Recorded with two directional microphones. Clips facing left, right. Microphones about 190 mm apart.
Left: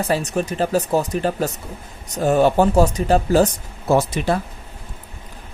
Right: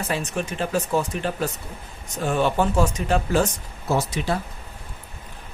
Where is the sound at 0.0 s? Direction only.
35° left (ahead or behind).